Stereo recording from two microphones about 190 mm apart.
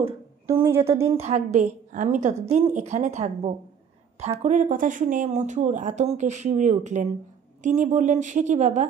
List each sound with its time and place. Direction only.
0.7 s speech: 15° right (ahead or behind)
1.2 s speech: 35° right (ahead or behind)